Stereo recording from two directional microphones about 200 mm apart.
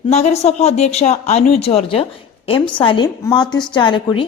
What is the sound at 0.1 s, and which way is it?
A woman's voice, 35° left (ahead or behind).